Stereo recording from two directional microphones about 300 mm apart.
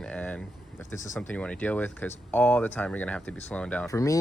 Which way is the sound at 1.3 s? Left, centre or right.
Centre.